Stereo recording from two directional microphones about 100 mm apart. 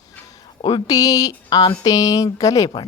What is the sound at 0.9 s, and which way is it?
Speech, 40° left (ahead or behind).